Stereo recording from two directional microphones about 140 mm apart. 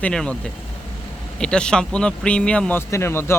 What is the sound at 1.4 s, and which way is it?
A man's voice, 5° left (ahead or behind).